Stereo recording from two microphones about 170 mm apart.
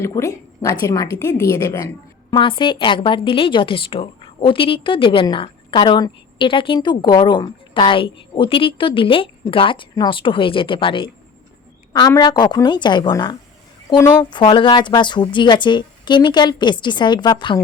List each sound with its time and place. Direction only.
0.0 s a woman's voice: 20° left (ahead or behind)